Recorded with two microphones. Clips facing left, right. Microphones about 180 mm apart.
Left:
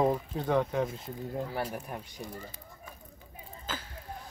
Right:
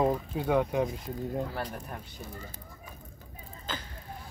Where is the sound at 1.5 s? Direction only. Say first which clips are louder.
Left 2 dB; 10° left (ahead or behind).